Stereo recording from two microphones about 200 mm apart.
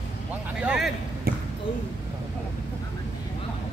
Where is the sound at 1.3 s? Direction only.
50° right (ahead or behind).